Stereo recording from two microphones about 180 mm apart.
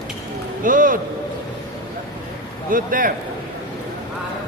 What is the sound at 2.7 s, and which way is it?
Speech, 50° right (ahead or behind).